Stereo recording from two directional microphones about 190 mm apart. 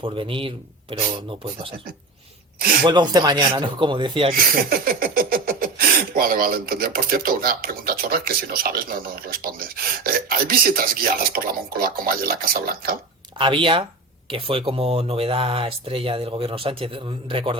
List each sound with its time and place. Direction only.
0.0 s speech: 25° right (ahead or behind)
2.8 s speech: 20° right (ahead or behind)
4.7 s speech: 50° right (ahead or behind)
13.4 s speech: 25° right (ahead or behind)